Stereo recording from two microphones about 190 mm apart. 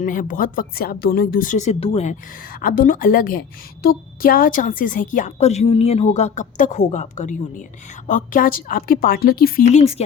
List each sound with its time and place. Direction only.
0.0 s speech: 45° left (ahead or behind)
2.4 s a woman's voice: 50° left (ahead or behind)